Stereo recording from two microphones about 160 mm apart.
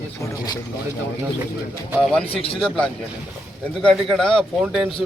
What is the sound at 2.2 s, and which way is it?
Speech, 35° left (ahead or behind).